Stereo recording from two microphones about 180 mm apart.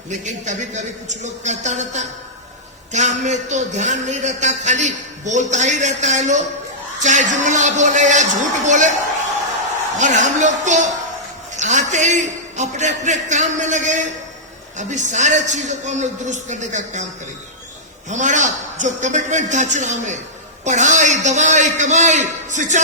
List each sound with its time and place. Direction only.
0.1 s a man's voice: 40° right (ahead or behind)
10.0 s a man's voice: 40° right (ahead or behind)
18.1 s a man's voice: 45° right (ahead or behind)